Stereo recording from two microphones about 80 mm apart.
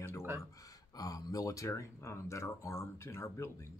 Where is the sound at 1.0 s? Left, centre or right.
Left.